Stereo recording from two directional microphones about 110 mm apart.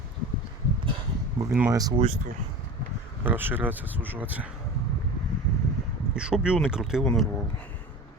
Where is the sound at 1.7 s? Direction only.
35° right (ahead or behind).